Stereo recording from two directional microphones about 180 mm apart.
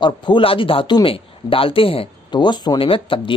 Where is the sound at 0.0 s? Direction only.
25° left (ahead or behind).